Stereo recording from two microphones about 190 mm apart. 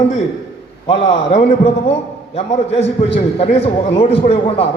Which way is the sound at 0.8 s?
30° left (ahead or behind).